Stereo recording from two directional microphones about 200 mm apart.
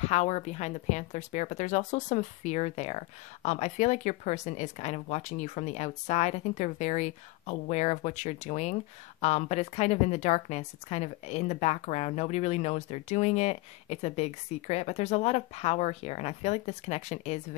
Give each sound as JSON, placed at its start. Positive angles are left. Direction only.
{"t": 0.0, "sound": "a woman's voice", "side_deg": 35}